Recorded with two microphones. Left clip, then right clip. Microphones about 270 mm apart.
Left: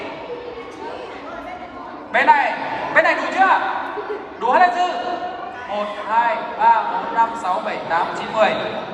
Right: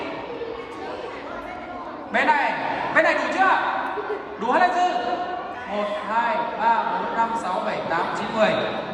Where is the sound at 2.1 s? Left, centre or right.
Left.